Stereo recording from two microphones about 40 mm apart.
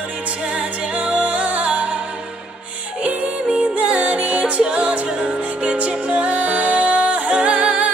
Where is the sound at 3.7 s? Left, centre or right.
Right.